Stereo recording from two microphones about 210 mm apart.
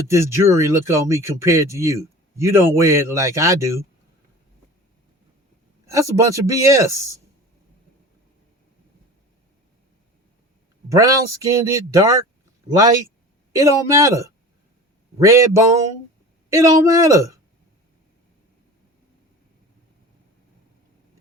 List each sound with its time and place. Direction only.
0.1 s speech: 15° right (ahead or behind)
5.9 s speech: 15° right (ahead or behind)
10.8 s speech: 15° right (ahead or behind)